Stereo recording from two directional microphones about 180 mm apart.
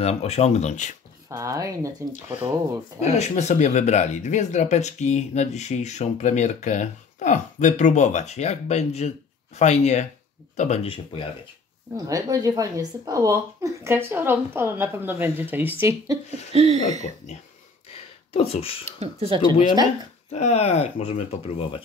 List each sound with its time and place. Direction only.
0.0 s speech: 35° left (ahead or behind)
1.3 s speech: 15° right (ahead or behind)
3.0 s speech: 40° left (ahead or behind)
12.1 s speech: 20° right (ahead or behind)
16.5 s speech: 35° right (ahead or behind)
17.9 s a sound: 35° left (ahead or behind)
18.9 s speech: 35° right (ahead or behind)
20.3 s speech: 40° left (ahead or behind)